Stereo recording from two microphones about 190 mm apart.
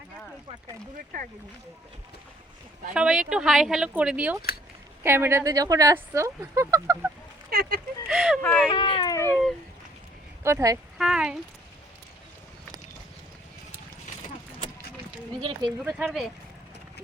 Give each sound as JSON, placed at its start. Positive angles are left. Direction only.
{"t": 2.9, "sound": "speech", "side_deg": -5}
{"t": 7.5, "sound": "speech", "side_deg": -50}
{"t": 8.1, "sound": "speech", "side_deg": -5}
{"t": 8.4, "sound": "speech", "side_deg": 5}
{"t": 8.7, "sound": "speech", "side_deg": 25}
{"t": 9.1, "sound": "a sound", "side_deg": 15}
{"t": 10.4, "sound": "speech", "side_deg": -15}
{"t": 10.9, "sound": "a sound", "side_deg": -5}
{"t": 15.4, "sound": "speech", "side_deg": -25}
{"t": 15.8, "sound": "speech", "side_deg": -5}